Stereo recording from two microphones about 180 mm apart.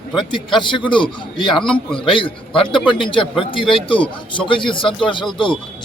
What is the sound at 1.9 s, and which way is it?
Speech, 30° left (ahead or behind).